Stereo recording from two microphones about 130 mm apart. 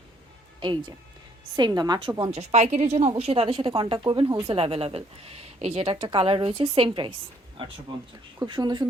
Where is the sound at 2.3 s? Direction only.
55° right (ahead or behind).